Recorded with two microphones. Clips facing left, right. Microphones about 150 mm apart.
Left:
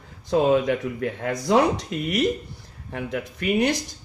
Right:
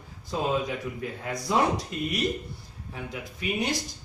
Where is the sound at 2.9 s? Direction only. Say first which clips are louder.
Left 8 dB; 70° left (ahead or behind).